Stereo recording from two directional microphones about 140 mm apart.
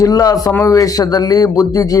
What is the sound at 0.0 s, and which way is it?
A man's voice, 25° left (ahead or behind).